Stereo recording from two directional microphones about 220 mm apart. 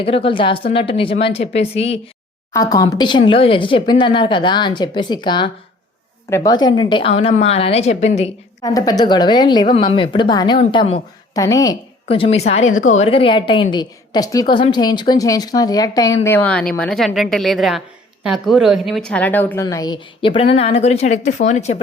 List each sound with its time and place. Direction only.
0.0 s speech: 25° left (ahead or behind)
2.5 s speech: 15° left (ahead or behind)
8.6 s a woman's voice: 15° left (ahead or behind); by 21.8 s 30° left (ahead or behind)